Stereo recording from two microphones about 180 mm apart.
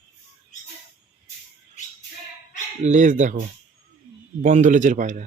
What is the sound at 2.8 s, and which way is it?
Speech, 40° right (ahead or behind).